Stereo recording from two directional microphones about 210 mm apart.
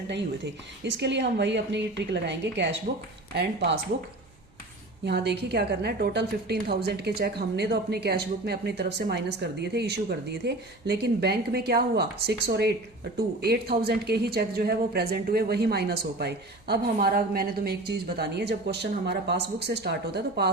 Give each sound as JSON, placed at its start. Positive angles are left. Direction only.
{"t": 0.9, "sound": "a woman's voice", "side_deg": -55}
{"t": 5.0, "sound": "a woman's voice", "side_deg": -50}